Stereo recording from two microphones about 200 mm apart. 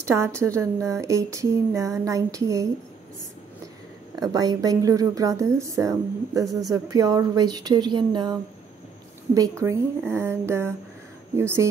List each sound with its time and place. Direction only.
0.0 s a woman's voice: 15° right (ahead or behind)
4.2 s a woman's voice: 20° right (ahead or behind)